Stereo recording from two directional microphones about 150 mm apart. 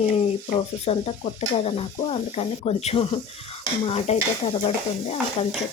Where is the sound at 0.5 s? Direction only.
40° left (ahead or behind).